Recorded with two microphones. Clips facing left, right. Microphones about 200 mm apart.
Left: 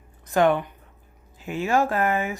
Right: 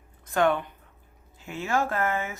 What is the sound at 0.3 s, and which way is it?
Speech, 20° left (ahead or behind).